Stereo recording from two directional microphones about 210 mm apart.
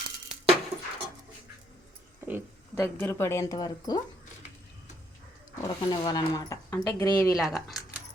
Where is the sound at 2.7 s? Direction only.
10° left (ahead or behind).